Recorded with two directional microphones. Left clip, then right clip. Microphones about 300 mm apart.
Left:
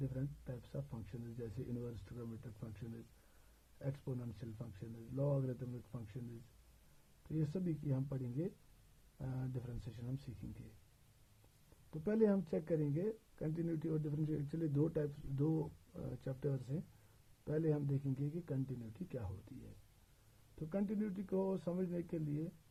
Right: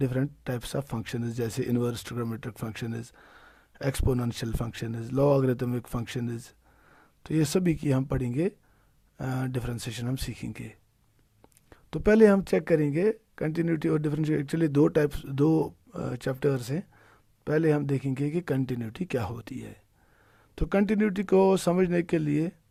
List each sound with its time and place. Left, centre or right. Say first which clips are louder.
0.1 s speech: right 17 dB; right
7.3 s speech: right 17 dB; right
11.9 s speech: right 16 dB; right
20.6 s speech: right 16 dB; right